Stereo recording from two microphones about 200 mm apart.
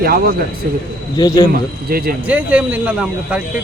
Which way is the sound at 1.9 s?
50° right (ahead or behind).